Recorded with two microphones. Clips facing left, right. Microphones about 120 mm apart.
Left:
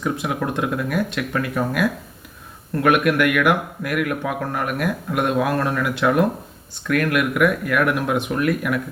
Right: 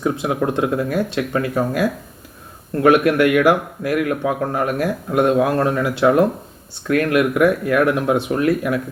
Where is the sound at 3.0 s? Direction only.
30° right (ahead or behind).